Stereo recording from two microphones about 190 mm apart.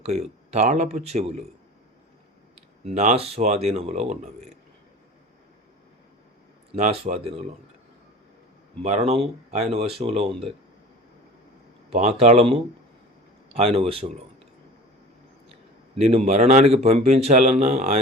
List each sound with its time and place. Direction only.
0.0 s a man's voice: 35° right (ahead or behind)
2.8 s a man's voice: 35° right (ahead or behind)
7.1 s a man's voice: 40° right (ahead or behind)
8.8 s a man's voice: 35° right (ahead or behind)
11.9 s a man's voice: 35° right (ahead or behind)
16.0 s a man's voice: 35° right (ahead or behind)